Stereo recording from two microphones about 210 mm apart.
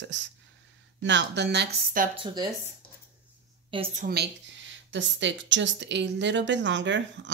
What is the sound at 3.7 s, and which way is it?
Speech, 30° right (ahead or behind).